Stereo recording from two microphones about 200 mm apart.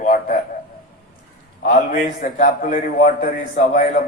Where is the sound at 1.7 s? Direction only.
40° left (ahead or behind).